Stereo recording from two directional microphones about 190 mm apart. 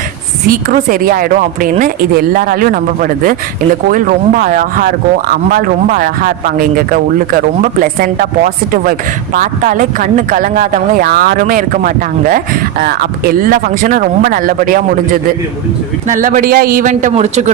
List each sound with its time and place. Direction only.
0.4 s speech: 50° right (ahead or behind)